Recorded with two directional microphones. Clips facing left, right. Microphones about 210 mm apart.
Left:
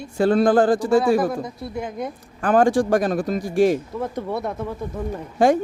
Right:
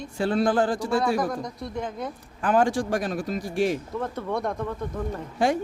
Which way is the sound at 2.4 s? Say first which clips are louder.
Left 5 dB; 50° left (ahead or behind).